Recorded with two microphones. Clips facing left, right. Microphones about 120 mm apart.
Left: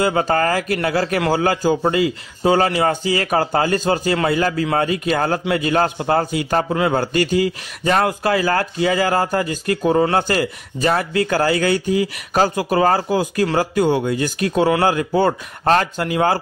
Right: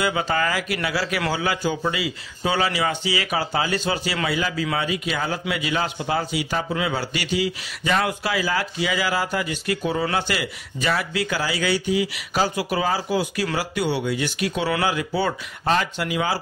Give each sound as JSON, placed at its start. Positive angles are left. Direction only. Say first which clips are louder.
{"t": 0.0, "sound": "a man's voice", "louder": "left 5 dB", "side_deg": 45}